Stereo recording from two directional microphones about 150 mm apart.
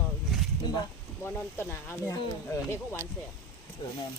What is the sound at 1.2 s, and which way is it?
Speech, 15° left (ahead or behind).